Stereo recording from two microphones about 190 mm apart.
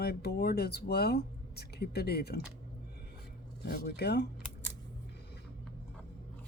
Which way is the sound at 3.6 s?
55° left (ahead or behind).